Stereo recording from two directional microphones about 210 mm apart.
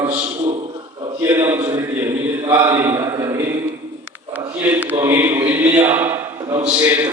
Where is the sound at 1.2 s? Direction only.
10° right (ahead or behind).